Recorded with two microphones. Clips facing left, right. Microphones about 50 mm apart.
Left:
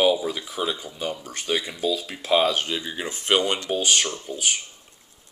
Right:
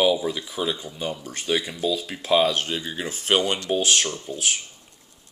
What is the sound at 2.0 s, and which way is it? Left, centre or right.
Speech, centre.